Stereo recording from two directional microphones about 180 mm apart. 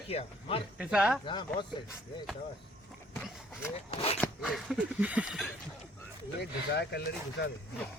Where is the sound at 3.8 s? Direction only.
35° left (ahead or behind).